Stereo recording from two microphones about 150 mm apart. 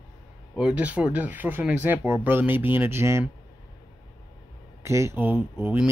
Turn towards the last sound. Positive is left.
turn(degrees=-10)  # may be behind; listen again after turning